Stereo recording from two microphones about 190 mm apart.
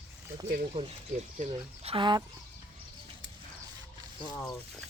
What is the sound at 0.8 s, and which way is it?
Speech, 30° right (ahead or behind).